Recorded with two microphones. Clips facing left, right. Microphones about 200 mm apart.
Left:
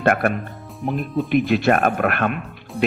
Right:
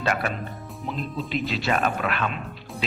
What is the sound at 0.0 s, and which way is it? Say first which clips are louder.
A man's voice: left 7 dB; 55° left (ahead or behind).